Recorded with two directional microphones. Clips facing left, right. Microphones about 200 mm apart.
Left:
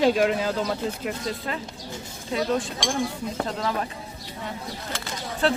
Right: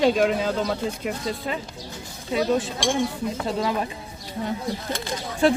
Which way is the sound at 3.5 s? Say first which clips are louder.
Right 6 dB; 10° right (ahead or behind).